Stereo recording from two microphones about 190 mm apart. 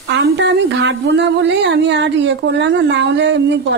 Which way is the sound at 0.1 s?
65° right (ahead or behind).